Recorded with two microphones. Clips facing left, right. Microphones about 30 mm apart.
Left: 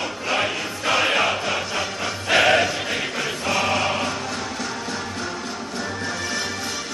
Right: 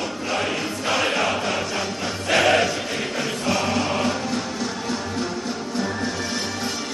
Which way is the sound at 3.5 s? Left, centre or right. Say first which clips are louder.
Left 3 dB; left.